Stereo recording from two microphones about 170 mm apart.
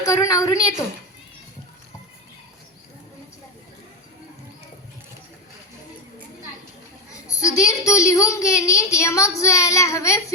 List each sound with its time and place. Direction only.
0.0 s a woman's voice: 20° left (ahead or behind)
7.1 s a child's voice: 20° left (ahead or behind)